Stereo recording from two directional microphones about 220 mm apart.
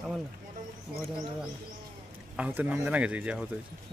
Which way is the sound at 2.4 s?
5° right (ahead or behind).